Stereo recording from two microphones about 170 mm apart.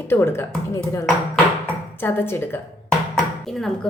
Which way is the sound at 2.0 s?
15° left (ahead or behind).